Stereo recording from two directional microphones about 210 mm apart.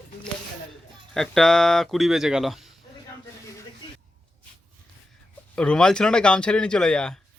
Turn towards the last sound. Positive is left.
turn(degrees=5)  # may be behind; listen again after turning